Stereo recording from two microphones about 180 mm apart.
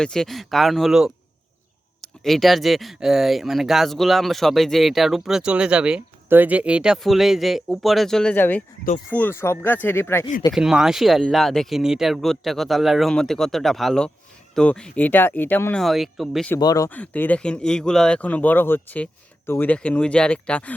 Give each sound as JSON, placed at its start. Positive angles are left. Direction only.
{"t": 0.0, "sound": "speech", "side_deg": 5}
{"t": 10.5, "sound": "speech", "side_deg": -5}
{"t": 16.6, "sound": "speech", "side_deg": 20}